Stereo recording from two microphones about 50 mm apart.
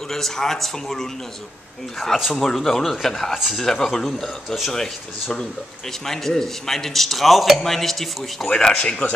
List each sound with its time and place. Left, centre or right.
0.1 s speech: centre
2.0 s a man's voice: centre
8.5 s speech: centre